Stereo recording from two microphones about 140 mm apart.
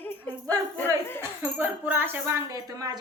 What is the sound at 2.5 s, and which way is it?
Speech, 25° right (ahead or behind).